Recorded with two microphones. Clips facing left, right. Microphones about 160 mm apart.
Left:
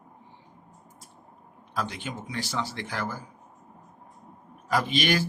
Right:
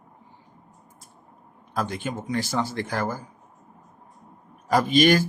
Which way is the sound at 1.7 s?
45° right (ahead or behind).